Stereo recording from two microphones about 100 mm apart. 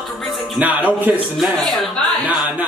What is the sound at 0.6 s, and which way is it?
Speech, 15° right (ahead or behind).